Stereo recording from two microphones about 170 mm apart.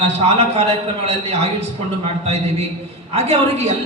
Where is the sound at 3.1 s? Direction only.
40° right (ahead or behind).